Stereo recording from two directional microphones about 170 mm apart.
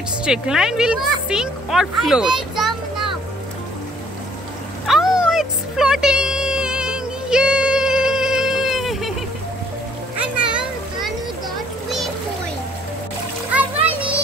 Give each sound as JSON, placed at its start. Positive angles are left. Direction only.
{"t": 0.2, "sound": "speech", "side_deg": -5}
{"t": 4.8, "sound": "a sound", "side_deg": -5}
{"t": 10.1, "sound": "children playing", "side_deg": -5}
{"t": 13.5, "sound": "music", "side_deg": -10}